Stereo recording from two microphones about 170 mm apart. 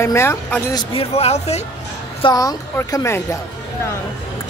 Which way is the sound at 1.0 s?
40° left (ahead or behind).